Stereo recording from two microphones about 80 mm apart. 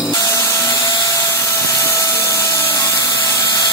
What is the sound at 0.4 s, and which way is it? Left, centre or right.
Vacuum cleaner, left.